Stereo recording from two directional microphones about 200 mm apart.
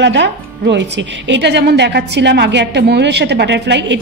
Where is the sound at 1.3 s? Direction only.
60° right (ahead or behind).